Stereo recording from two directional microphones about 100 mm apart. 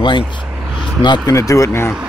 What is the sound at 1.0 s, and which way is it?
Speech, 50° left (ahead or behind).